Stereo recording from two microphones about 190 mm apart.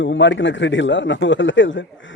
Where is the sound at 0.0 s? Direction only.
75° left (ahead or behind).